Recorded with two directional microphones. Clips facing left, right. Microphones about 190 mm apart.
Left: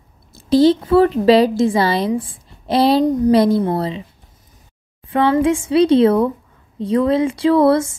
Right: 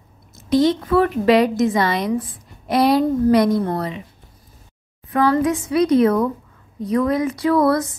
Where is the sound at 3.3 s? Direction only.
30° left (ahead or behind).